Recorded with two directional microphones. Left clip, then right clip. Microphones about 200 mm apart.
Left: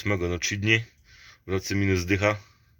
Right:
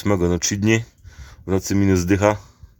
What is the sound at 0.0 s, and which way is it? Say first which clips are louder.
Speech: right 7 dB; 30° right (ahead or behind).